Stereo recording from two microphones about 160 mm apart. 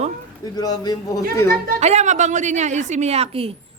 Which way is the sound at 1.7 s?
45° right (ahead or behind).